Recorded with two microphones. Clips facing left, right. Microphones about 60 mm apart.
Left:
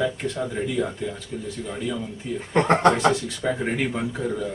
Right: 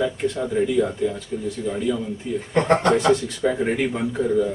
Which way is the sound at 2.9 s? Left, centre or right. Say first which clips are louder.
Right 3 dB; centre.